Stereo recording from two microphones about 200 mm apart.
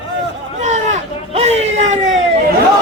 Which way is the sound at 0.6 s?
35° right (ahead or behind).